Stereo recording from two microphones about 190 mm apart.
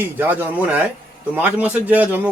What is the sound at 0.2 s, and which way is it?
A man's voice, 10° right (ahead or behind).